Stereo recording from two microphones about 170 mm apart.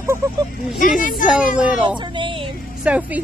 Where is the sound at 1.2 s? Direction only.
50° left (ahead or behind).